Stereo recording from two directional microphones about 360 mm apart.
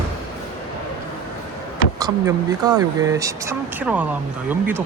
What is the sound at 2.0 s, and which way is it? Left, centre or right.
Speech, centre.